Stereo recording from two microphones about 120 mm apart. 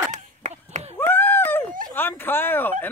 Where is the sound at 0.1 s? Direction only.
90° right.